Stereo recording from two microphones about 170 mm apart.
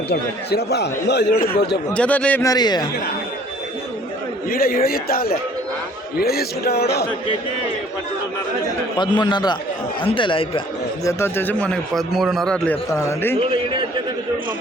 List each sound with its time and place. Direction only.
0.1 s speech: 75° left (ahead or behind)
1.9 s a man's voice: 10° left (ahead or behind)
2.4 s a man's voice: 20° left (ahead or behind)
4.4 s a man's voice: 60° left (ahead or behind)
9.0 s a man's voice: 25° left (ahead or behind)
11.0 s a man's voice: 15° left (ahead or behind)
12.9 s a man's voice: 15° left (ahead or behind)